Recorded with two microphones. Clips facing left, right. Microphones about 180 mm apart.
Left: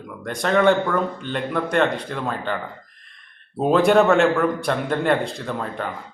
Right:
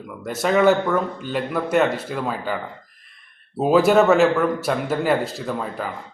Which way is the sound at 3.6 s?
5° right (ahead or behind).